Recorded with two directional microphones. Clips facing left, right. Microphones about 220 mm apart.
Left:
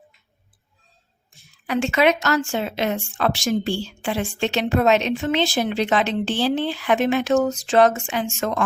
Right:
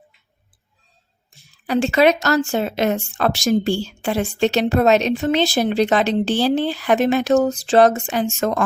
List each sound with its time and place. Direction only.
1.6 s a woman's voice: 35° right (ahead or behind)